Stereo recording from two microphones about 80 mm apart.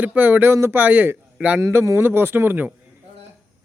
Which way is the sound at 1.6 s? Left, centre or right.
Right.